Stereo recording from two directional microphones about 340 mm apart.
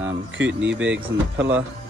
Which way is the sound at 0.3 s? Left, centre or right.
Right.